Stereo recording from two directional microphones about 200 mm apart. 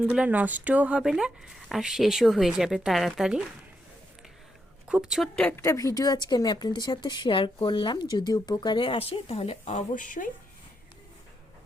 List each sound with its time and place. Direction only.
0.0 s speech: 5° right (ahead or behind)
4.9 s speech: 5° right (ahead or behind); by 10.2 s 40° left (ahead or behind)